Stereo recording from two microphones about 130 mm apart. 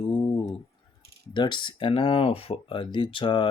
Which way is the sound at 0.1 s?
35° left (ahead or behind).